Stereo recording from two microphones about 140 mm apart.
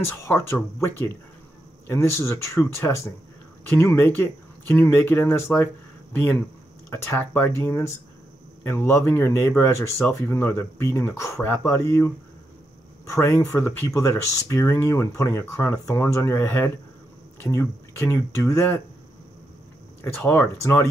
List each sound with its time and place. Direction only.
0.2 s speech: 20° left (ahead or behind)
6.9 s speech: 15° left (ahead or behind)
13.1 s speech: 20° left (ahead or behind)
20.0 s speech: 15° left (ahead or behind)